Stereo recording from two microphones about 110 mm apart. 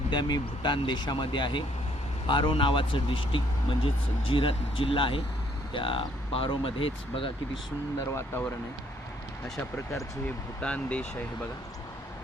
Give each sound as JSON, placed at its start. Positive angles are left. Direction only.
{"t": 0.1, "sound": "speech", "side_deg": 40}
{"t": 8.1, "sound": "speech", "side_deg": 20}
{"t": 9.6, "sound": "speech", "side_deg": 20}
{"t": 10.6, "sound": "speech", "side_deg": 10}